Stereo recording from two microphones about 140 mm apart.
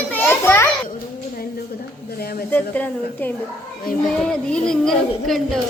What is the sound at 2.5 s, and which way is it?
Speech, 10° left (ahead or behind).